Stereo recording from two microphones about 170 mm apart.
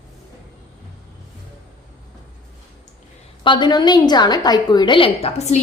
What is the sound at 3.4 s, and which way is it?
A woman's voice, 25° left (ahead or behind).